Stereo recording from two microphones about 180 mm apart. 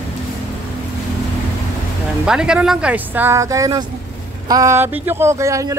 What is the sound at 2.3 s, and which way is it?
Speech, 5° right (ahead or behind).